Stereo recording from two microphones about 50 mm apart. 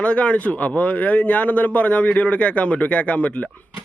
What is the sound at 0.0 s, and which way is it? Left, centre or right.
Speech, left.